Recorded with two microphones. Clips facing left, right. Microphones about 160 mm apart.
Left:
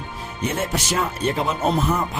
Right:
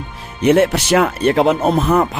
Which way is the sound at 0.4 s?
75° right (ahead or behind).